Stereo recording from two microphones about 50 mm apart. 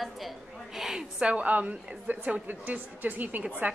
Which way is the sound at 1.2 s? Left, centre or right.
Right.